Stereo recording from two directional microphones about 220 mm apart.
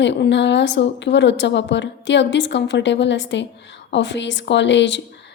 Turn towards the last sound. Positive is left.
turn(degrees=55)  # may be behind; listen again after turning